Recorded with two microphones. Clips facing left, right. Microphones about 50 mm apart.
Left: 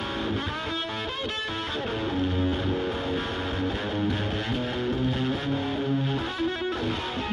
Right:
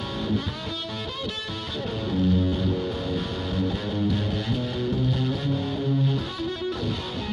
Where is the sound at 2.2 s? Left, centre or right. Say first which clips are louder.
Right 3 dB; left.